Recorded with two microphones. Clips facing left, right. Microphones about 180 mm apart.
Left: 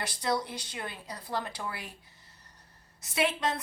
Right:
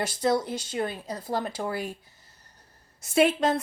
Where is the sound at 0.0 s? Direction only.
45° right (ahead or behind).